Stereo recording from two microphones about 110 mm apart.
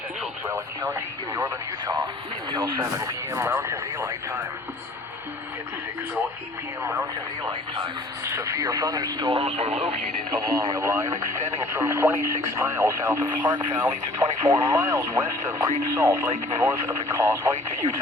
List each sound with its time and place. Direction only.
0.4 s speech: 25° right (ahead or behind)
8.2 s speech: 25° right (ahead or behind)
9.3 s speech: 60° right (ahead or behind)
10.3 s speech: 35° right (ahead or behind)